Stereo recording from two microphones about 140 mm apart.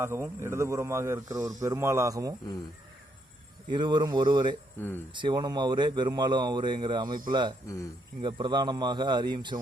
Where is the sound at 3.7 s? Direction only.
35° right (ahead or behind).